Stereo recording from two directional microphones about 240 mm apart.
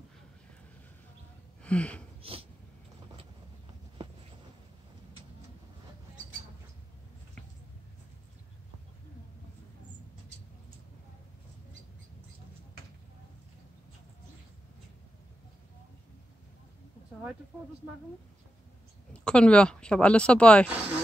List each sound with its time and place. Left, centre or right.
1.6 s speech: centre
19.1 s speech: centre
20.6 s speech: centre